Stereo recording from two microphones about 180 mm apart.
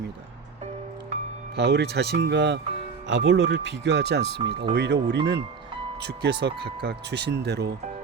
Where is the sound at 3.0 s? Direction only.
90° right; by 7.7 s 65° right (ahead or behind).